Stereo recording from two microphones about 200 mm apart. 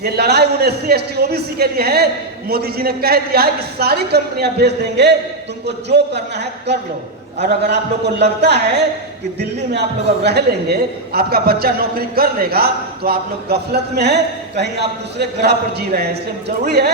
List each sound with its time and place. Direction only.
0.0 s a man's voice: 55° right (ahead or behind)
10.2 s a man's voice: 55° right (ahead or behind)